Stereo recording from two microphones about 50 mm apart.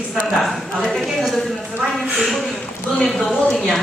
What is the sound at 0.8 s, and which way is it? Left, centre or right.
Speech, centre.